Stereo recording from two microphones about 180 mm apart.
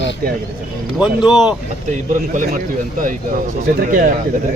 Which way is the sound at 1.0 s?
5° right (ahead or behind).